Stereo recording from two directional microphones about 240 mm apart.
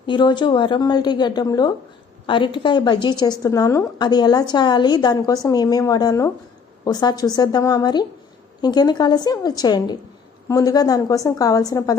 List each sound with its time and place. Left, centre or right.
0.0 s a woman's voice: centre